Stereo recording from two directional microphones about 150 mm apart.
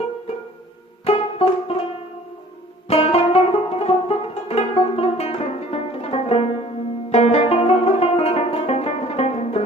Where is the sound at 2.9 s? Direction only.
40° left (ahead or behind).